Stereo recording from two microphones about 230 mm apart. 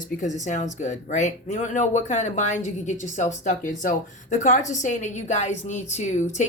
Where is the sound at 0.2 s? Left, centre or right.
Left.